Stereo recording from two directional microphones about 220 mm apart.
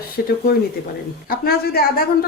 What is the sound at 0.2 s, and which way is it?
Speech, 45° left (ahead or behind).